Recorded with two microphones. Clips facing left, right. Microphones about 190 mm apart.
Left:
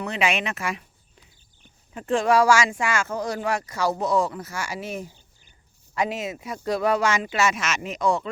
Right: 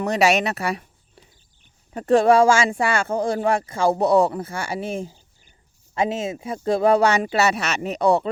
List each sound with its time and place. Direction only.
0.0 s speech: 40° right (ahead or behind)
1.9 s speech: 40° right (ahead or behind)